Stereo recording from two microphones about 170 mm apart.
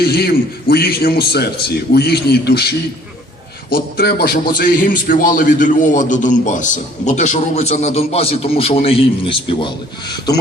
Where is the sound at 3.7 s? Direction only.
60° left (ahead or behind).